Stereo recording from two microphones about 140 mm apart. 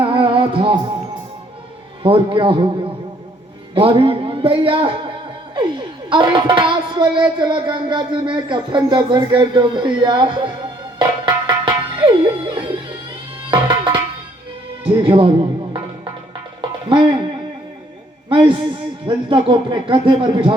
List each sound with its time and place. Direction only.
0.0 s music: 40° right (ahead or behind)
2.0 s speech: 40° right (ahead or behind)
3.8 s speech: 40° right (ahead or behind)
10.9 s music: 30° right (ahead or behind)
13.5 s tabla: 30° right (ahead or behind)
14.8 s speech: 35° right (ahead or behind)
16.6 s music: 35° right (ahead or behind)
18.3 s a man's voice: 35° right (ahead or behind)